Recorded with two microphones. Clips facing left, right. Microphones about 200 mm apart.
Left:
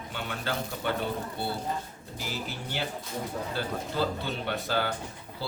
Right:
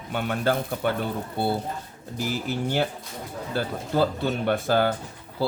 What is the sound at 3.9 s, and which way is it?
Speech, 55° right (ahead or behind).